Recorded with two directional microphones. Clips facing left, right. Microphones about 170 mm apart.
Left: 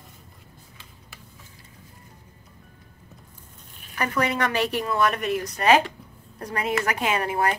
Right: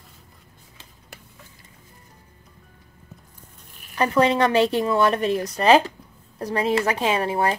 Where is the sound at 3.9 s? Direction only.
25° right (ahead or behind).